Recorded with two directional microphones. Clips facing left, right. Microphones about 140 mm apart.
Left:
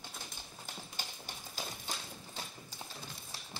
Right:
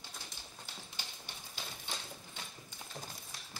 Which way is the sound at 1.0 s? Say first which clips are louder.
Left 4 dB; 45° left (ahead or behind).